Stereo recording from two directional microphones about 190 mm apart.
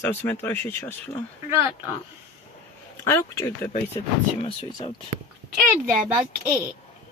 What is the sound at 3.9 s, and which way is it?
Speech, 30° left (ahead or behind).